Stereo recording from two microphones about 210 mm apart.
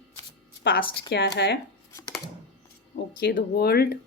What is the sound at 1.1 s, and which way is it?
Speech, 55° left (ahead or behind).